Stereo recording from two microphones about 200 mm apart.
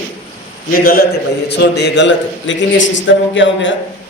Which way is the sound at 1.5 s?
60° left (ahead or behind).